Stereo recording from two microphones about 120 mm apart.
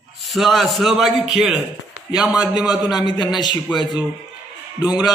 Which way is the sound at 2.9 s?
35° left (ahead or behind).